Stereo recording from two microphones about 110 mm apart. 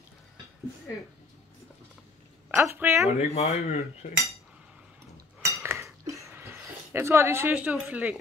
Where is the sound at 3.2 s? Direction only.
80° left.